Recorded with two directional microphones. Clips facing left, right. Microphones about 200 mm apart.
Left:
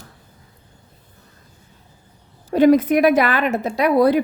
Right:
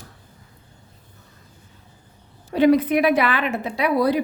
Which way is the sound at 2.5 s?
45° left (ahead or behind).